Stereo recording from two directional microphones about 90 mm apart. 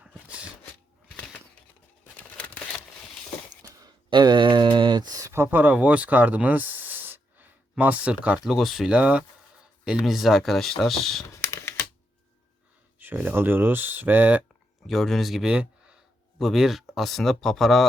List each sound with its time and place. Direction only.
2.1 s crumpling: 15° left (ahead or behind)
4.1 s a sound: 55° right (ahead or behind)
5.3 s speech: 20° right (ahead or behind)
8.4 s speech: centre (ahead or behind)
11.3 s typing: 30° left (ahead or behind)
13.0 s speech: 20° right (ahead or behind)
14.8 s speech: 5° left (ahead or behind)